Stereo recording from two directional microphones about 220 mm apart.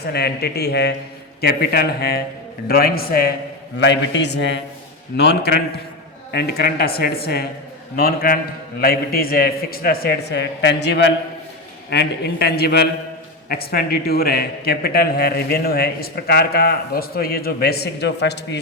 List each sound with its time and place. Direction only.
0.0 s a man's voice: 45° left (ahead or behind)
3.8 s a man's voice: 55° left (ahead or behind)